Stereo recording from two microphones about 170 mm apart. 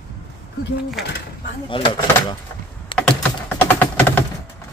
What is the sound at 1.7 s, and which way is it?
Speech, 30° left (ahead or behind).